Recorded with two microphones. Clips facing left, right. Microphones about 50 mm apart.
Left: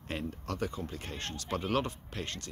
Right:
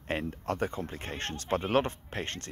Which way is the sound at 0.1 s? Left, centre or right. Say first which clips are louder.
Right 5 dB; right.